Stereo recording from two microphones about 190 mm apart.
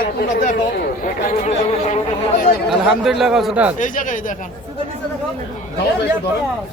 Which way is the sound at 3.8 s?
45° left (ahead or behind).